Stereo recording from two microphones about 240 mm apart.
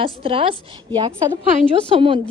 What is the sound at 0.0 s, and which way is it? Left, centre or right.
Speech, right.